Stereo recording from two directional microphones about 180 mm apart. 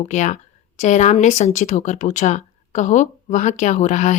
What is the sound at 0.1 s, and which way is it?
A woman's voice, 40° left (ahead or behind).